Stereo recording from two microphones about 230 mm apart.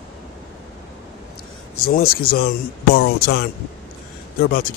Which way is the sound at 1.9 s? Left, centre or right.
Left.